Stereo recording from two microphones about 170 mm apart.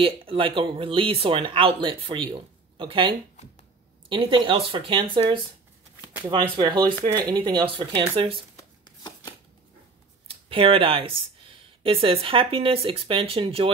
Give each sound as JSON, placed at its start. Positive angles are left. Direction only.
{"t": 0.0, "sound": "speech", "side_deg": -30}
{"t": 8.8, "sound": "shuffling cards", "side_deg": 25}
{"t": 10.5, "sound": "speech", "side_deg": -30}